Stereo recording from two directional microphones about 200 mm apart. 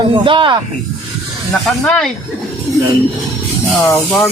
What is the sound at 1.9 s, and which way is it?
Speech, 5° left (ahead or behind).